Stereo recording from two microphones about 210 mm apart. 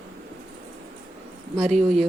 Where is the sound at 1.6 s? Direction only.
Centre (ahead or behind).